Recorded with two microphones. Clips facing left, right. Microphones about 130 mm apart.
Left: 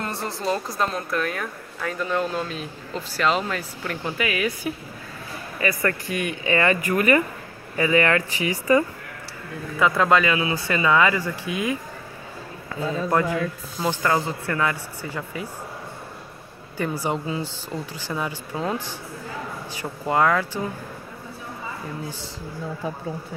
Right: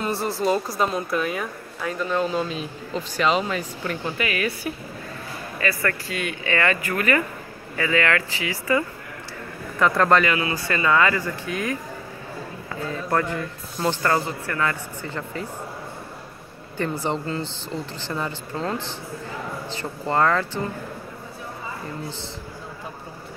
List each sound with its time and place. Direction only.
0.0 s speech: 5° right (ahead or behind)
5.6 s speech: 20° left (ahead or behind)
9.8 s speech: 5° left (ahead or behind)
13.7 s speech: 10° left (ahead or behind)
14.2 s speech: 20° left (ahead or behind)
16.7 s speech: 10° left (ahead or behind)